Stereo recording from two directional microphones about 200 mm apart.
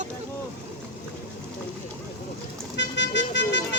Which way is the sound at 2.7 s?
60° left (ahead or behind).